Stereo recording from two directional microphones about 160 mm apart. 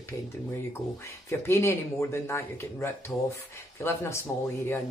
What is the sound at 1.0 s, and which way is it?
Speech, 20° left (ahead or behind).